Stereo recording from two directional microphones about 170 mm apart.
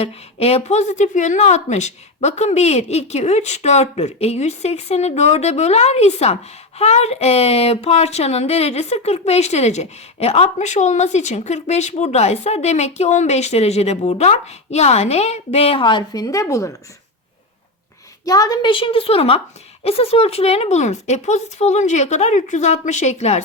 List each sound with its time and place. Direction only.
0.0 s speech: 35° left (ahead or behind); by 16.7 s 20° left (ahead or behind)
18.3 s speech: 20° left (ahead or behind); by 23.4 s 40° left (ahead or behind)